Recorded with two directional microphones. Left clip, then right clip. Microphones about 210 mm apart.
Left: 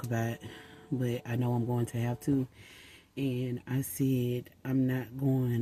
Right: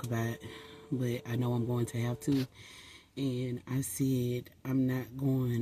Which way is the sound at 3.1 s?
Centre (ahead or behind).